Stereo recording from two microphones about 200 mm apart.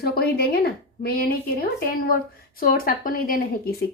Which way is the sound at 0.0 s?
50° left (ahead or behind).